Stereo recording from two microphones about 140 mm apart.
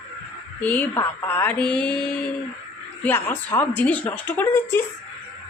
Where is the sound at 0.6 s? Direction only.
10° left (ahead or behind).